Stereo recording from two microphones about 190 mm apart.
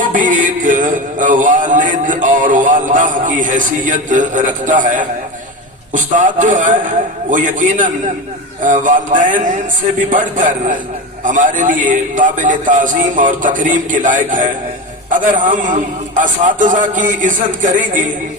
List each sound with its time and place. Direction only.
0.0 s music: 45° right (ahead or behind)
5.9 s a man's voice: 45° right (ahead or behind)